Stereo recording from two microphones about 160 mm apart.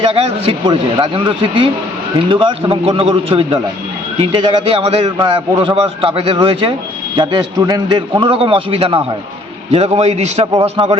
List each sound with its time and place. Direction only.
0.0 s a man's voice: 35° right (ahead or behind)